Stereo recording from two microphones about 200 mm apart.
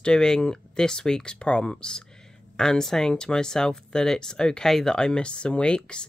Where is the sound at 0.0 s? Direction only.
5° left (ahead or behind).